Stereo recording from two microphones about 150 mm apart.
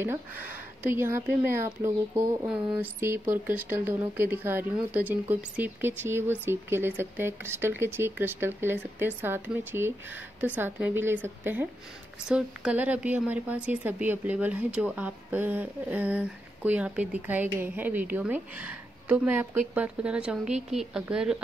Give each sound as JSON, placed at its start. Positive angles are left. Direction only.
{"t": 0.0, "sound": "a woman's voice", "side_deg": -15}